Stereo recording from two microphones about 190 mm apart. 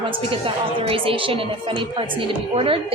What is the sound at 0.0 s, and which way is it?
A woman's voice, 30° right (ahead or behind).